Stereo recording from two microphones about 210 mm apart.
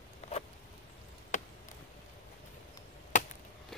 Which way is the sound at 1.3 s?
35° left (ahead or behind).